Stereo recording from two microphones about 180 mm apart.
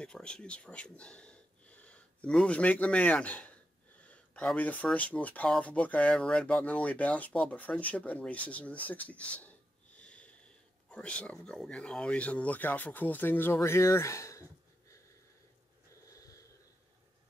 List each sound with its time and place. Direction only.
0.0 s speech: 5° left (ahead or behind)
8.9 s a sound: 10° left (ahead or behind)
10.9 s speech: 5° left (ahead or behind)
16.1 s wheeze: 20° left (ahead or behind)